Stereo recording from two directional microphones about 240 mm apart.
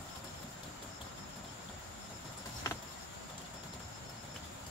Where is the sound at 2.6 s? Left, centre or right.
Centre.